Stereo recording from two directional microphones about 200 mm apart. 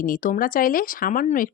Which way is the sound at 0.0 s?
40° left (ahead or behind).